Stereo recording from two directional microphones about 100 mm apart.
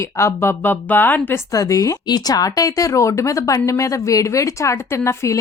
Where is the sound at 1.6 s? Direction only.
35° left (ahead or behind).